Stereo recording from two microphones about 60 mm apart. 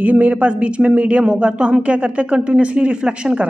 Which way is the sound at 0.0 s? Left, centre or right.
Right.